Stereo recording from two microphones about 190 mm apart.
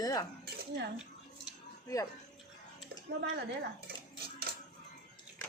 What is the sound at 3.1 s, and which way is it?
Speech, 65° right (ahead or behind).